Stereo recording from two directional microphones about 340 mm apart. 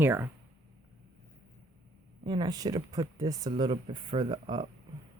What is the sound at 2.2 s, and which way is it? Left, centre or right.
Speech, centre.